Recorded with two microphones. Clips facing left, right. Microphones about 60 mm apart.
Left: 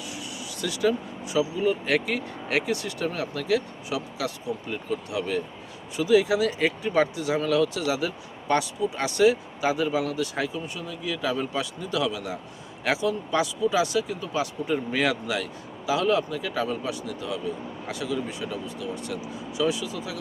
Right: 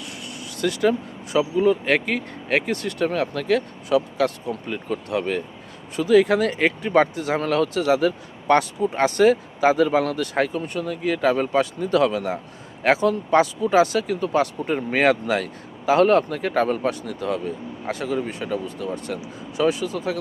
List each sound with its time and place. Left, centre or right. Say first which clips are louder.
0.0 s vehicle: right 1 dB; right
1.8 s speech: right 4 dB; right